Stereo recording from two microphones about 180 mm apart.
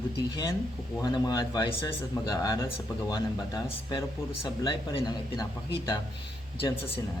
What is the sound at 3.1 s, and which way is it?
Speech, 25° left (ahead or behind).